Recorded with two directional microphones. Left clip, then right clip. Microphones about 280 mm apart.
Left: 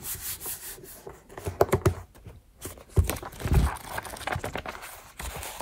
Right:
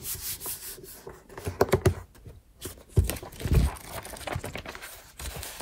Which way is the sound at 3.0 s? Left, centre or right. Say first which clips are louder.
Left 2 dB; left.